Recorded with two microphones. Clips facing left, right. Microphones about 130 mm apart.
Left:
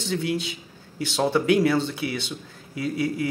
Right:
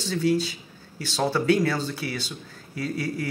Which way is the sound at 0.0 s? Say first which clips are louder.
Right 3 dB; 20° left (ahead or behind).